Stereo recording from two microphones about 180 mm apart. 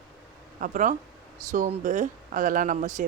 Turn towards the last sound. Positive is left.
turn(degrees=-45)  # may be behind; listen again after turning